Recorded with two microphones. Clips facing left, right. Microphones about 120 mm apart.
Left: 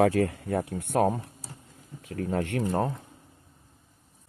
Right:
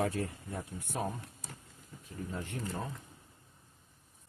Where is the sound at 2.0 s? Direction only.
85° left.